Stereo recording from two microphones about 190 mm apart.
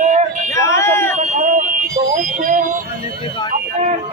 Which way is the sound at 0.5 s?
15° left (ahead or behind).